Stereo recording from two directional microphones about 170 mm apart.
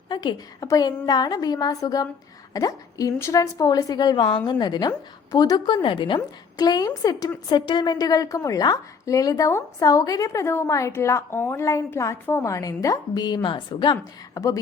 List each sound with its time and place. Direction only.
0.1 s a woman's voice: 25° left (ahead or behind)